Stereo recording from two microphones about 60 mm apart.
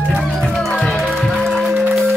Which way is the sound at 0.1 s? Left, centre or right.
Centre.